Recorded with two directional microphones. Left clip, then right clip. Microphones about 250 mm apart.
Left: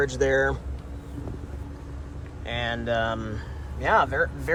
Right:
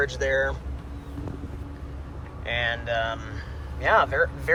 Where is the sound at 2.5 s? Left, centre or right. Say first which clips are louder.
Right 1 dB; left.